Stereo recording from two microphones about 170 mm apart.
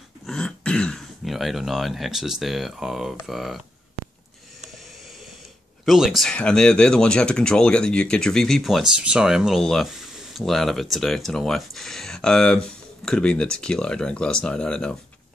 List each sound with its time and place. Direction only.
0.3 s speech: 5° left (ahead or behind)
5.9 s speech: centre (ahead or behind)